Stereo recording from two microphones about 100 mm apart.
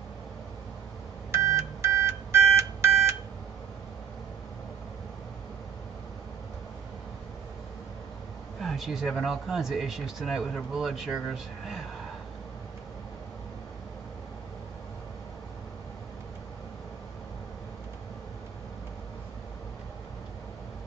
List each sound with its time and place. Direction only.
1.3 s telephone dialing: 30° right (ahead or behind)
8.5 s speech: centre (ahead or behind)